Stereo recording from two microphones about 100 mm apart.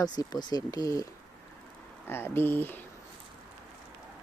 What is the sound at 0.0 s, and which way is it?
Speech, 40° left (ahead or behind).